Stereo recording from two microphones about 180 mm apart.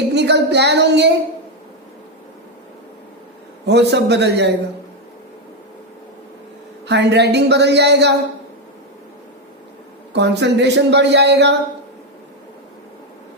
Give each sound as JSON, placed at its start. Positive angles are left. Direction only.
{"t": 0.1, "sound": "child singing", "side_deg": -70}
{"t": 3.7, "sound": "speech", "side_deg": -70}
{"t": 6.8, "sound": "speech", "side_deg": -70}
{"t": 10.1, "sound": "speech", "side_deg": -70}